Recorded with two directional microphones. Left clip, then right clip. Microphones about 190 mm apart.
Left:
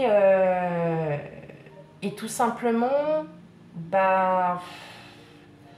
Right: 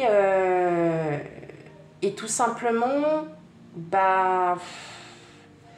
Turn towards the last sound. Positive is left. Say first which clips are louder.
# right 1 dB
turn(degrees=-30)  # may be behind; listen again after turning